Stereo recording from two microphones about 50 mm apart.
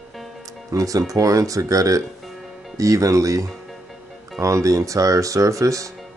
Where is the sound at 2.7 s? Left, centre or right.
Right.